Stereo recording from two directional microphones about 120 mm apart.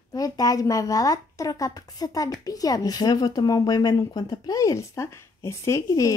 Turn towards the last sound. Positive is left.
turn(degrees=30)  # may be behind; listen again after turning